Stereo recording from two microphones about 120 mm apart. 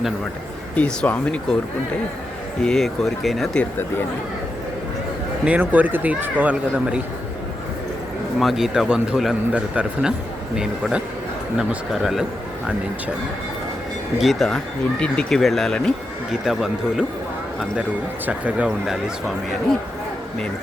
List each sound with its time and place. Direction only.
0.8 s speech: 10° left (ahead or behind)
2.6 s a man's voice: 5° left (ahead or behind)
5.5 s speech: 10° right (ahead or behind)
8.4 s a man's voice: centre (ahead or behind)
14.2 s a man's voice: centre (ahead or behind)
18.3 s speech: 10° right (ahead or behind)